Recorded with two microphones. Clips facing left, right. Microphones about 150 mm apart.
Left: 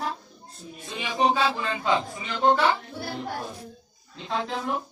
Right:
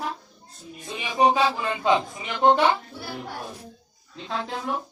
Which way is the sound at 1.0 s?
15° right (ahead or behind).